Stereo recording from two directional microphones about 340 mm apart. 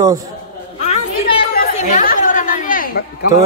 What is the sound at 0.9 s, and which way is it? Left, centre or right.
Chatter, centre.